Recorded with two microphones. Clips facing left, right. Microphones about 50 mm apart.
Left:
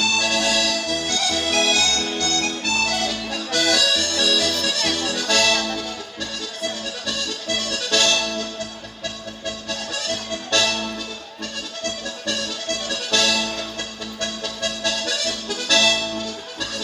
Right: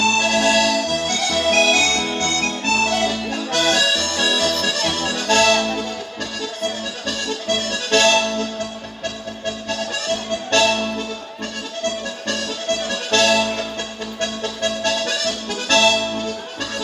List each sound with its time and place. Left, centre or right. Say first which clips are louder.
0.0 s accordion: right 4 dB; right
7.1 s accordion: right 4 dB; right
9.6 s accordion: right 4 dB; right
10.5 s music: right 5 dB; right
12.3 s music: right 4 dB; right
14.2 s accordion: right 4 dB; right